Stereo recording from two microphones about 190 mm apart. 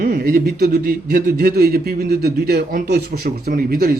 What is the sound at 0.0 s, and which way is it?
A man's voice, 50° right (ahead or behind).